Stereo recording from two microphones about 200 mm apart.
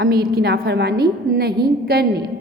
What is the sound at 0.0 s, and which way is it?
A woman's voice, 50° right (ahead or behind).